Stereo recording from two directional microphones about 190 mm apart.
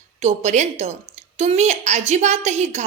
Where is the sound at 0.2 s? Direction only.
35° right (ahead or behind).